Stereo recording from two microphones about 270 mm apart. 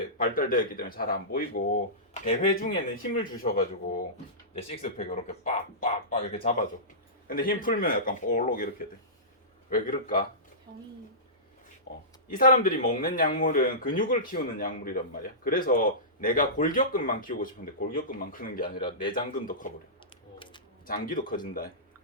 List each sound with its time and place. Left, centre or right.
0.2 s speech: left
4.5 s speech: left
11.9 s speech: left
18.8 s speech: centre
19.1 s speech: left
20.8 s speech: left